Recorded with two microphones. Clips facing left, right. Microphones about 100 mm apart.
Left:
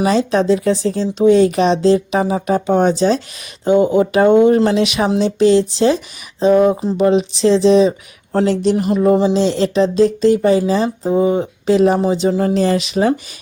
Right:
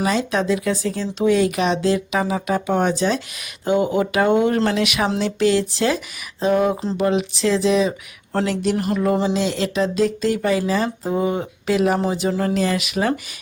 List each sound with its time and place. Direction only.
0.0 s speech: 30° left (ahead or behind)
5.0 s speech: 15° left (ahead or behind)
9.3 s speech: 30° left (ahead or behind)